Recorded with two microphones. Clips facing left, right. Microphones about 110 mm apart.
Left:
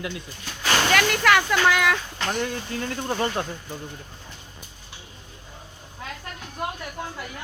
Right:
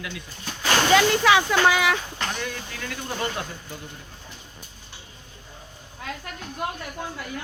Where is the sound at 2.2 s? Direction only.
20° left (ahead or behind).